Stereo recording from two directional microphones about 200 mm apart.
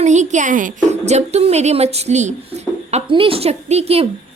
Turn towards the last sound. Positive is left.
turn(degrees=-30)  # may be behind; listen again after turning